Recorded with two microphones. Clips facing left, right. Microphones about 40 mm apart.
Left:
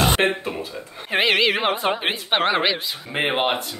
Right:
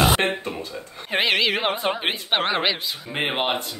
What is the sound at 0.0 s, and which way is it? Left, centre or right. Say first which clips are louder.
Speech: left 1 dB; centre.